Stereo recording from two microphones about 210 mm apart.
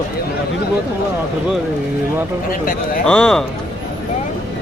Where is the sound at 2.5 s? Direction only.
40° left (ahead or behind).